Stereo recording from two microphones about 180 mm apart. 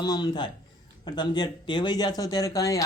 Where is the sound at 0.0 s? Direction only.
25° left (ahead or behind).